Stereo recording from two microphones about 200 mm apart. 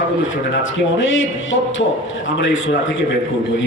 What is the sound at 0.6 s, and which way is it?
Speech, 75° left (ahead or behind).